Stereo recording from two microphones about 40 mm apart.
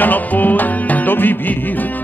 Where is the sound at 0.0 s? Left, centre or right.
Left.